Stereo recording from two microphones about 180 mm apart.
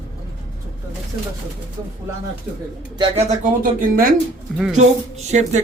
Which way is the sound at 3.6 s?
50° right (ahead or behind).